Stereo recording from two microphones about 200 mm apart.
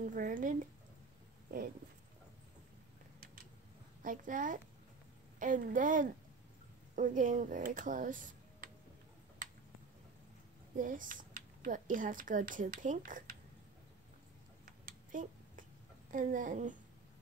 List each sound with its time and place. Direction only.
0.0 s speech: 40° right (ahead or behind)
4.0 s speech: 40° right (ahead or behind)
10.8 s speech: 40° right (ahead or behind)
14.9 s a sound: 40° right (ahead or behind)
16.1 s speech: 40° right (ahead or behind)